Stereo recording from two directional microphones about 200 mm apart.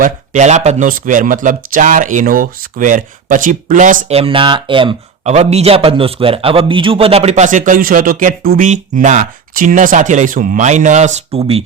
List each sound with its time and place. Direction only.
0.0 s speech: 35° right (ahead or behind)